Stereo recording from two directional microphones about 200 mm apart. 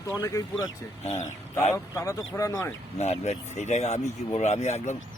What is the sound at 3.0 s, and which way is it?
Speech, 35° left (ahead or behind).